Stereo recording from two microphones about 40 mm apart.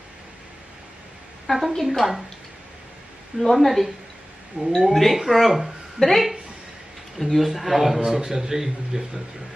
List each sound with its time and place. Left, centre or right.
1.5 s a woman's voice: centre
3.4 s a man's voice: centre
4.6 s speech: right
4.9 s a man's voice: centre
6.0 s a man's voice: centre